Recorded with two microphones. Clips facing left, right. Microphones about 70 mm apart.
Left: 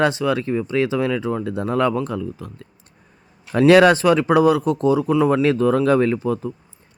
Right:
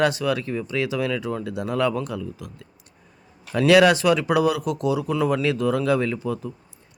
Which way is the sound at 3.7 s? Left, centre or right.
Left.